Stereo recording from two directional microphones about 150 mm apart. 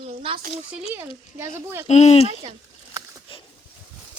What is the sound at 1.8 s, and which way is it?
Speech, 50° left (ahead or behind).